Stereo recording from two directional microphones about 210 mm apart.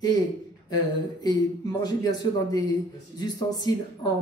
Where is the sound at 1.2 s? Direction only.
20° left (ahead or behind).